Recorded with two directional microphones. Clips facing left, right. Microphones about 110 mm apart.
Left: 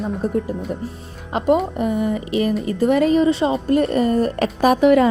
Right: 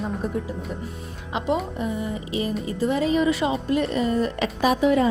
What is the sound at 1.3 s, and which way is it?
Speech, 45° left (ahead or behind).